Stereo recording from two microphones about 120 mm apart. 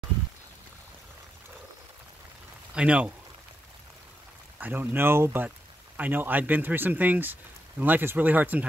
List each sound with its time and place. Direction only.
2.7 s speech: 10° right (ahead or behind)
4.6 s speech: 15° right (ahead or behind)